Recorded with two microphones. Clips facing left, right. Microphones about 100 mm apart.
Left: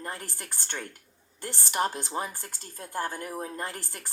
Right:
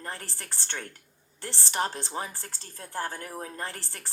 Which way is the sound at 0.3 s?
10° left (ahead or behind).